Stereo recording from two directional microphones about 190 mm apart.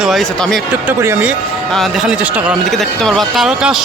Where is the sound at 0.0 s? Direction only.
Centre (ahead or behind).